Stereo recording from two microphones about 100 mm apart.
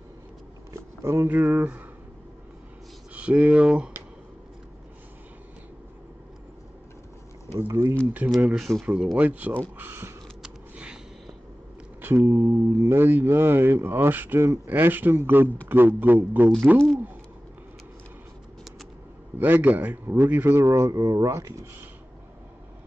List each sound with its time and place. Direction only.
1.0 s speech: 25° right (ahead or behind)
1.5 s speech: 15° right (ahead or behind)
3.2 s speech: 10° right (ahead or behind)
7.5 s speech: 30° right (ahead or behind)
8.5 s speech: 5° right (ahead or behind); by 10.1 s 25° right (ahead or behind)
10.4 s a sound: 5° right (ahead or behind)
12.0 s speech: 25° right (ahead or behind)
19.3 s speech: 20° right (ahead or behind)